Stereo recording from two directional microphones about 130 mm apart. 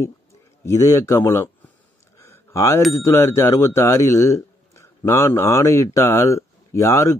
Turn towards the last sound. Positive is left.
turn(degrees=20)  # may be behind; listen again after turning